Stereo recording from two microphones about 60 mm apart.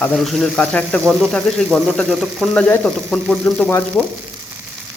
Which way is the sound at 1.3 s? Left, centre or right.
Centre.